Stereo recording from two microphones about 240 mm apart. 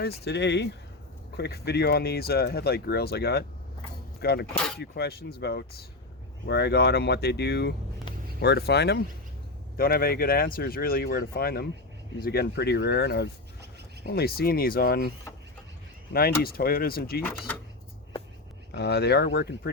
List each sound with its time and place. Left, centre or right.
0.0 s speech: left
16.4 s speech: left
18.7 s speech: left